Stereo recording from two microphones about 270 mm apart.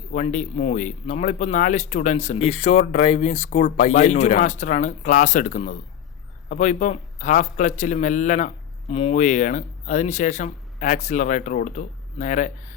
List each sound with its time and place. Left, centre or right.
0.1 s a man's voice: left